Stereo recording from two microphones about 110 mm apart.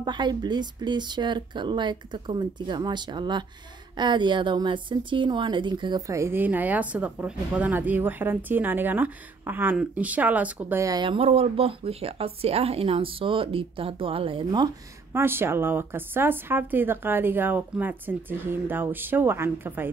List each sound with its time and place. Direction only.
0.0 s speech: 45° right (ahead or behind)
6.0 s a woman's voice: 25° right (ahead or behind)
10.8 s speech: 35° right (ahead or behind)
11.1 s speech: 60° right (ahead or behind)
15.1 s speech: 20° right (ahead or behind)